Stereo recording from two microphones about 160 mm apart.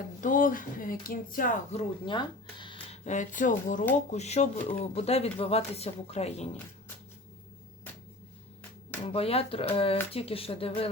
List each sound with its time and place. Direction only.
0.2 s speech: 55° left (ahead or behind)
2.0 s speech: 30° left (ahead or behind)
9.0 s speech: 40° left (ahead or behind)